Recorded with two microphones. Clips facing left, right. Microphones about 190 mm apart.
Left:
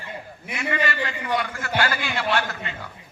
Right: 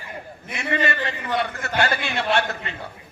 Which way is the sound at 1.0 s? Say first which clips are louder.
Right 1 dB; 25° right (ahead or behind).